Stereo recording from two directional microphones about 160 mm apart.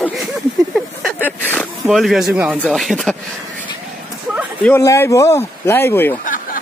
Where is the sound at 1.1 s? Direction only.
10° left (ahead or behind).